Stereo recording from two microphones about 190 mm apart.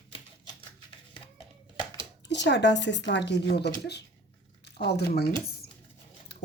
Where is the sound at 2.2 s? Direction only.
65° left (ahead or behind).